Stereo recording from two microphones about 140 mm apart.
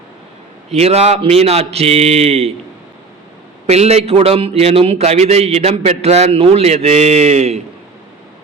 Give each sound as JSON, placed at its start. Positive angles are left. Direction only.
{"t": 0.7, "sound": "a man's voice", "side_deg": -45}
{"t": 3.7, "sound": "a man's voice", "side_deg": -50}